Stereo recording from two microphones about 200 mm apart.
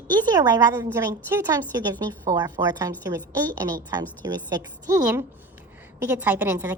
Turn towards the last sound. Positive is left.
turn(degrees=-15)  # may be behind; listen again after turning